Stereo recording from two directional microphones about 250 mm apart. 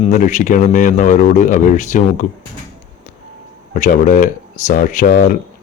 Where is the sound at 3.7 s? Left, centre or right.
Left.